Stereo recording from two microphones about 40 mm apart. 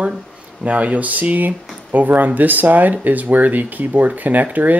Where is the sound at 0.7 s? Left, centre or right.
Right.